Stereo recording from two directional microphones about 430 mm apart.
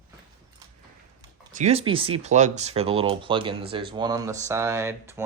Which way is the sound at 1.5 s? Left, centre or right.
Centre.